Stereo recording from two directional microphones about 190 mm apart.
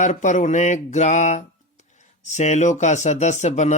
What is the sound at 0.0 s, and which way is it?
Music, 40° left (ahead or behind).